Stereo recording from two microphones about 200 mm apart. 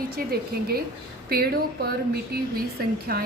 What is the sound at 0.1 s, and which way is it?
A woman's voice, 50° right (ahead or behind).